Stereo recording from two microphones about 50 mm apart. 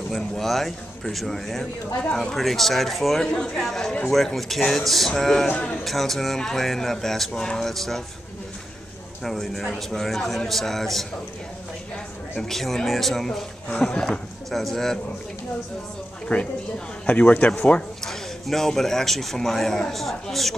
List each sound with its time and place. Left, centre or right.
0.1 s a man's voice: centre
3.2 s a man's voice: centre
9.2 s a man's voice: centre
12.4 s a man's voice: centre
13.7 s speech: left
14.5 s a man's voice: centre
16.3 s a woman's voice: left
17.1 s speech: left
18.0 s a man's voice: centre